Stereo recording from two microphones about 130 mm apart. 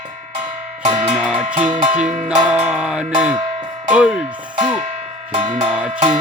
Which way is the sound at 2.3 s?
5° right (ahead or behind).